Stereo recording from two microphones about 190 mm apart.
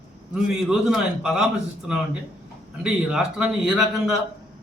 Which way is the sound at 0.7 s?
5° right (ahead or behind).